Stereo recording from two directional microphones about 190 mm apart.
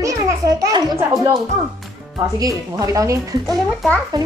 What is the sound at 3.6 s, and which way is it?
Speech, centre (ahead or behind).